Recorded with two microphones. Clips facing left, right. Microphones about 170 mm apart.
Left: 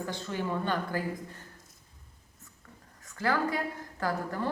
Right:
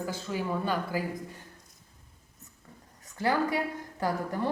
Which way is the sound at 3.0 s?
15° right (ahead or behind).